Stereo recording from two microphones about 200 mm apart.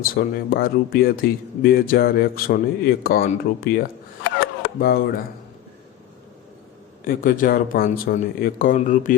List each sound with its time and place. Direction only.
0.0 s speech: 45° left (ahead or behind)
7.0 s speech: 45° left (ahead or behind)